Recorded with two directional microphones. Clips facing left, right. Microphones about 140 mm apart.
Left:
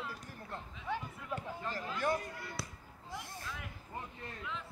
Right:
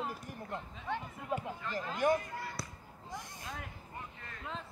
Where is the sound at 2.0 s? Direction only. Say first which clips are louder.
Right 5 dB; 15° right (ahead or behind).